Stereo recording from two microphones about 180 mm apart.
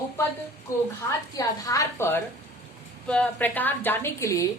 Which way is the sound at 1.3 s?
20° left (ahead or behind).